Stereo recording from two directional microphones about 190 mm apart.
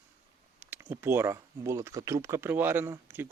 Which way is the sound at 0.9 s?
10° right (ahead or behind).